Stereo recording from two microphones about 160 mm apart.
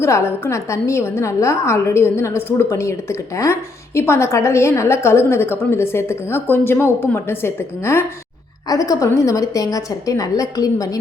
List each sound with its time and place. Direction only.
0.0 s a woman's voice: 15° left (ahead or behind)